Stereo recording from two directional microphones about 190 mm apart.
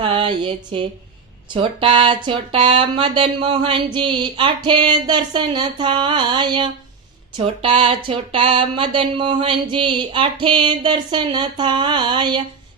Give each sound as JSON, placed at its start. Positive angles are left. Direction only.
{"t": 0.0, "sound": "speech", "side_deg": -25}